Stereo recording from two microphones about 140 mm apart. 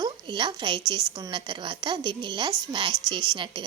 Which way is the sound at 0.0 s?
35° right (ahead or behind).